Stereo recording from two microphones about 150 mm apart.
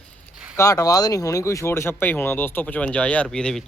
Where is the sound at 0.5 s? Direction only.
25° left (ahead or behind).